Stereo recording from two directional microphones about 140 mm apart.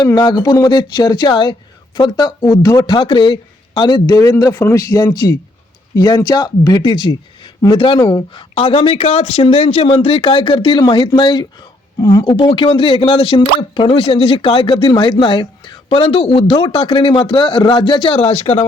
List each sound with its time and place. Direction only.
0.0 s speech: 30° left (ahead or behind); by 18.6 s 50° left (ahead or behind)